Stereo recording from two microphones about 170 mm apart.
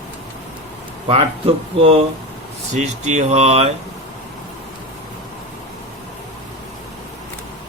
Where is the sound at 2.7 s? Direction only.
45° right (ahead or behind).